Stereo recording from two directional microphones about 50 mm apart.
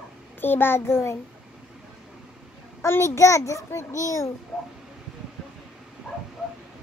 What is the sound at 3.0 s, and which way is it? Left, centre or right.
Speech, left.